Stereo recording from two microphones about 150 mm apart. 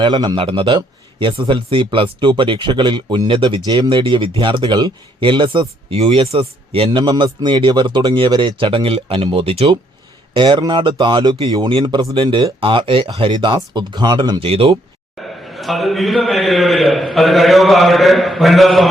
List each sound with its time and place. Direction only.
0.0 s a man's voice: 30° right (ahead or behind)
15.2 s a man's voice: centre (ahead or behind)